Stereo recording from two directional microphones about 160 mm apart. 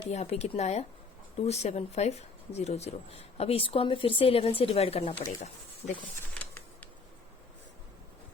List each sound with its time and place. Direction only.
0.1 s speech: 45° left (ahead or behind)
6.3 s creak: 10° left (ahead or behind)